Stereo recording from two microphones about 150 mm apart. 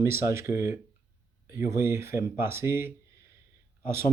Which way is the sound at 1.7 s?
15° right (ahead or behind).